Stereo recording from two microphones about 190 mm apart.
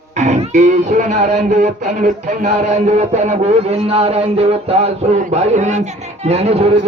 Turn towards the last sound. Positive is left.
turn(degrees=-35)  # may be behind; listen again after turning